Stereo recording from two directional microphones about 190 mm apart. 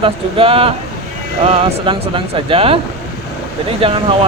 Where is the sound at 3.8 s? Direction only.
25° right (ahead or behind).